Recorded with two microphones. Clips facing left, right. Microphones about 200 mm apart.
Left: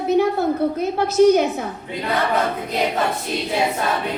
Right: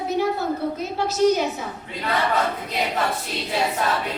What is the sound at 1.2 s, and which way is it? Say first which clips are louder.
Speech: left 2 dB; 55° left (ahead or behind).